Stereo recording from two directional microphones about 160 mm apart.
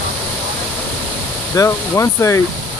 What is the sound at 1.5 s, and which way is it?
Speech, 20° left (ahead or behind).